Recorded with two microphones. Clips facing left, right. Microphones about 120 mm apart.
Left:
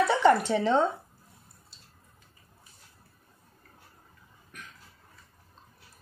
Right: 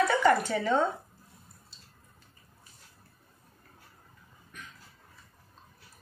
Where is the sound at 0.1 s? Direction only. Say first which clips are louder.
Left 2 dB; 25° left (ahead or behind).